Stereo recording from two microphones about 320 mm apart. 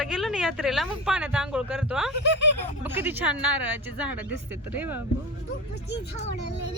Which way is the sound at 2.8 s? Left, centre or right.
Centre.